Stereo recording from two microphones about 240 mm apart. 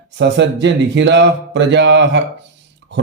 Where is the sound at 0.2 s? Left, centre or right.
Right.